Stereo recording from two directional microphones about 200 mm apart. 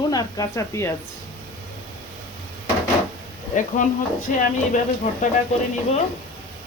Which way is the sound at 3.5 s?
40° left (ahead or behind).